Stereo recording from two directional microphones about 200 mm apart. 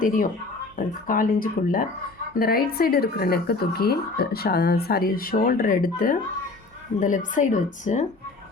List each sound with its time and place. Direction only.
0.0 s a woman's voice: 40° left (ahead or behind)